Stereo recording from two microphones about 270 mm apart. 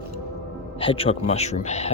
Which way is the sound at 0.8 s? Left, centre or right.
Centre.